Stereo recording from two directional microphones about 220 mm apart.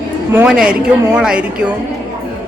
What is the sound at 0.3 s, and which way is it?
A woman's voice, 5° right (ahead or behind).